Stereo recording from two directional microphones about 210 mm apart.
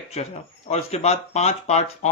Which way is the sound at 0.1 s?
30° left (ahead or behind).